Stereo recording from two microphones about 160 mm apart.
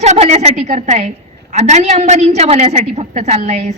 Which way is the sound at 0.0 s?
45° right (ahead or behind).